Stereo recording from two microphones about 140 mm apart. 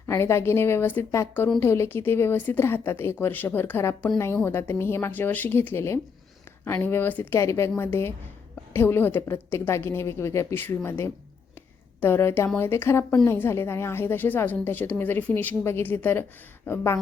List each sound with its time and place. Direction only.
0.0 s a woman's voice: 20° left (ahead or behind)